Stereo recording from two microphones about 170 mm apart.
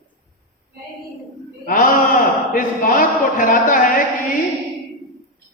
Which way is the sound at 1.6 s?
55° left (ahead or behind).